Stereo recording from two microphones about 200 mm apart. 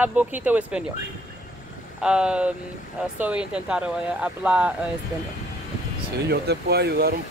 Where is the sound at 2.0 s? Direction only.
5° right (ahead or behind).